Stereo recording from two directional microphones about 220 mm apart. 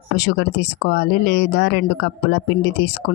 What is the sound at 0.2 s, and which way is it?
Speech, 50° left (ahead or behind).